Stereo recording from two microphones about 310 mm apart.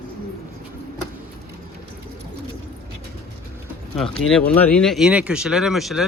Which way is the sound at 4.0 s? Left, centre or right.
Centre.